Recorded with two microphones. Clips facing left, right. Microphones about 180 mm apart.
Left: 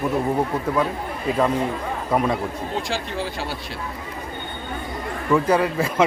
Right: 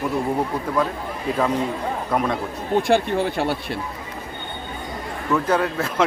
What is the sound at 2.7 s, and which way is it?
Speech, 60° right (ahead or behind).